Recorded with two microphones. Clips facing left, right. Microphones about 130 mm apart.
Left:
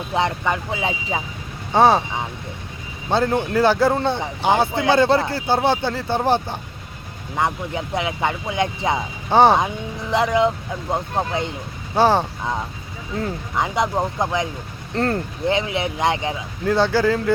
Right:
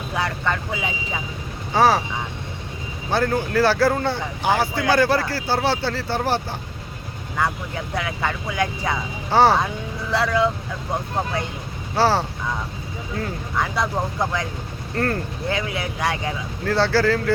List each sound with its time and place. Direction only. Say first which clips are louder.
0.1 s speech: left 3 dB; 25° left (ahead or behind)
0.7 s speech: left 3 dB; 30° left (ahead or behind)
3.1 s speech: left 2 dB; 20° left (ahead or behind)
11.9 s speech: left 3 dB; 20° left (ahead or behind)
13.6 s speech: left 3 dB; 20° left (ahead or behind)